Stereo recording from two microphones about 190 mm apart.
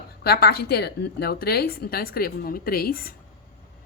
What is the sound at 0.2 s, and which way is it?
Speech, 55° left (ahead or behind).